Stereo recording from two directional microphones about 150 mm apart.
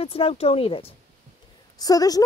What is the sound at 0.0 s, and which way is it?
Speech, 40° left (ahead or behind).